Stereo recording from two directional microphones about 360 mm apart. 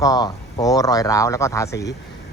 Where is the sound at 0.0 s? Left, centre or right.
Centre.